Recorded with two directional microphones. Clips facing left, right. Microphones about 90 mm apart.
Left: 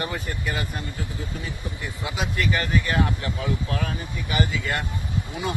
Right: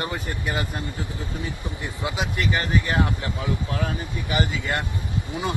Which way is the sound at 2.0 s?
25° right (ahead or behind).